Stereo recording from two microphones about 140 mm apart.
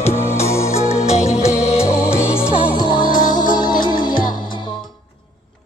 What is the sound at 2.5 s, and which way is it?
Music, 10° right (ahead or behind).